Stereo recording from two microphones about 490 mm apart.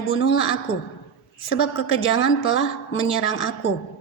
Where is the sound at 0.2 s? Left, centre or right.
Left.